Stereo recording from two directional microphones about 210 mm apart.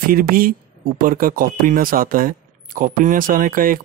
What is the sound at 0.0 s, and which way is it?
Speech, 45° right (ahead or behind).